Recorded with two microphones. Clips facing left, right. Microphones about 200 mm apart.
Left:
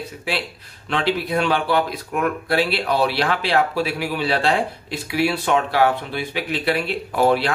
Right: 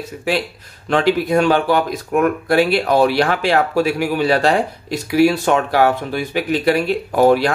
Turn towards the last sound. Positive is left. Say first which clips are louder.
# right 5 dB
turn(degrees=-45)  # may be behind; listen again after turning